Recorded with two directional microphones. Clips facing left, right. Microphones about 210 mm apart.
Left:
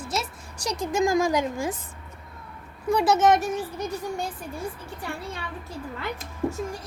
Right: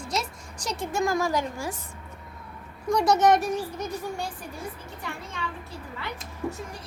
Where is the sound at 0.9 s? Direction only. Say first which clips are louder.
Left 4 dB; 15° left (ahead or behind).